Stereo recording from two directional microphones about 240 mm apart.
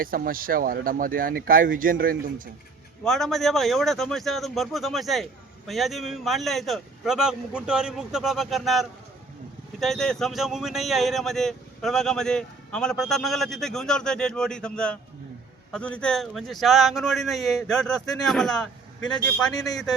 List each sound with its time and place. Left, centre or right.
0.0 s speech: right
3.0 s speech: centre